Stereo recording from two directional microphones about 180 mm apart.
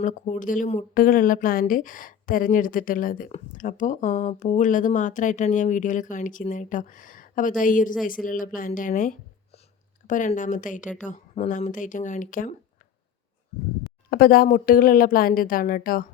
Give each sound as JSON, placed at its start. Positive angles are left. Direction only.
{"t": 0.0, "sound": "speech", "side_deg": 45}
{"t": 14.1, "sound": "speech", "side_deg": 55}